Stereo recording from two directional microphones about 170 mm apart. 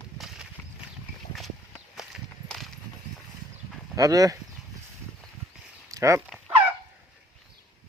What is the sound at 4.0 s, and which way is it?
Speech, 20° right (ahead or behind).